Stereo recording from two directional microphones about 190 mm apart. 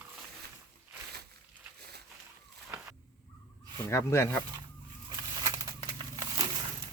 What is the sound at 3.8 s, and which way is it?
Speech, 15° left (ahead or behind).